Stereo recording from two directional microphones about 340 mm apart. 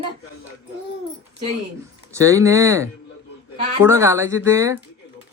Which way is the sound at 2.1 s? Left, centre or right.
Centre.